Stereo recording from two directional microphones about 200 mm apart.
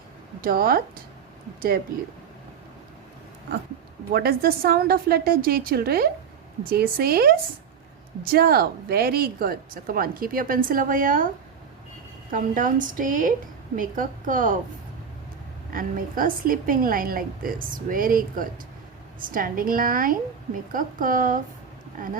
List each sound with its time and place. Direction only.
0.4 s speech: 45° right (ahead or behind)
4.1 s speech: 50° right (ahead or behind)
12.3 s a woman's voice: 40° right (ahead or behind)
15.7 s speech: 45° right (ahead or behind)